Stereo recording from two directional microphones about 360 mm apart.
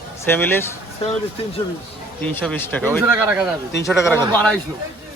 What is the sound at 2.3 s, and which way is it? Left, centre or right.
A man's voice, centre.